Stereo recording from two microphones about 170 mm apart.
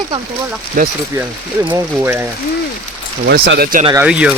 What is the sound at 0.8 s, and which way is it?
Speech, 55° right (ahead or behind).